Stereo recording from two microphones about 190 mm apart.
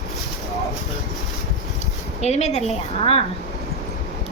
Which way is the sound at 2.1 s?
35° left (ahead or behind).